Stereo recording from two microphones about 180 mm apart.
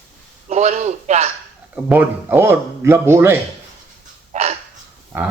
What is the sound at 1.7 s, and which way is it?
A man's voice, 10° right (ahead or behind).